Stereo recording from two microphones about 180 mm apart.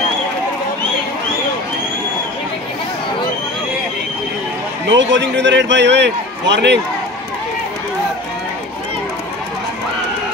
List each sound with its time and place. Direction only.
4.8 s a man's voice: 85° right